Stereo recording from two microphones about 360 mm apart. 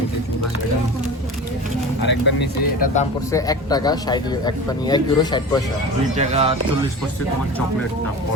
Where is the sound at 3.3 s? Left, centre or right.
Centre.